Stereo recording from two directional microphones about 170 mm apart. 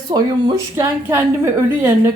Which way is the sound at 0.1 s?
20° right (ahead or behind).